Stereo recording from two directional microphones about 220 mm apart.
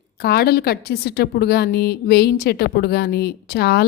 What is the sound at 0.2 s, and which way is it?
A woman's voice, 45° left (ahead or behind).